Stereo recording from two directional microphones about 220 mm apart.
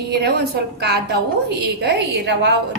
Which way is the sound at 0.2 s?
45° right (ahead or behind).